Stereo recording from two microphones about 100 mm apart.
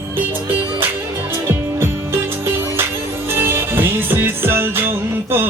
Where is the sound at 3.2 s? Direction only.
25° right (ahead or behind).